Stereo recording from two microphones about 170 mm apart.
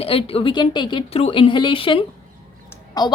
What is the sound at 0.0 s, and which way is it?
A woman's voice, 35° left (ahead or behind).